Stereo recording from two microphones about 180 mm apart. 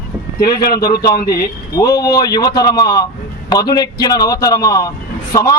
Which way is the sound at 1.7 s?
20° left (ahead or behind).